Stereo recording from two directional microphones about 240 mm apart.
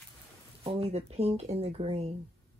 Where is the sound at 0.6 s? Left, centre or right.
Right.